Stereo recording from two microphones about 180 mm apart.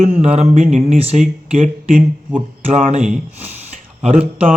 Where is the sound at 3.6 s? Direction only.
40° right (ahead or behind).